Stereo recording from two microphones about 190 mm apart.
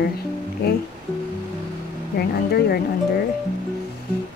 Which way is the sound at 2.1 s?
55° left (ahead or behind).